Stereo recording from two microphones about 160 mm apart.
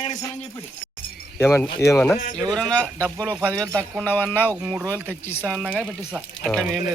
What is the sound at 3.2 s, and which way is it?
Speech, 10° right (ahead or behind).